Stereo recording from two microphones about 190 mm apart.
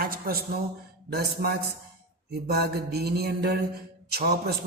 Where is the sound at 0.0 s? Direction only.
50° right (ahead or behind).